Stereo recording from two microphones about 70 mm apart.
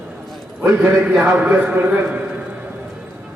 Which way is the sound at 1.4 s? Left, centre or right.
Right.